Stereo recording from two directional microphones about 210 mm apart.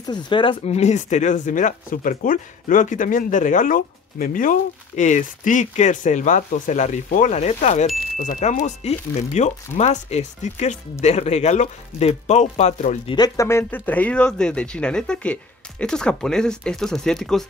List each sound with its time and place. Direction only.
0.0 s speech: 20° left (ahead or behind); by 17.5 s centre (ahead or behind)